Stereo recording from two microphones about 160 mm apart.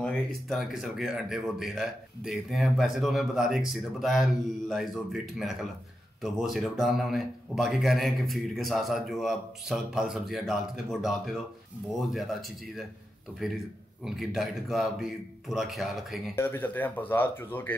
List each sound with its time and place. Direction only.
0.0 s speech: centre (ahead or behind)
16.3 s speech: 15° left (ahead or behind)